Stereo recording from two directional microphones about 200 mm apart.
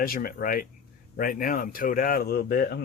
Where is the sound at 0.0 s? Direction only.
50° left (ahead or behind).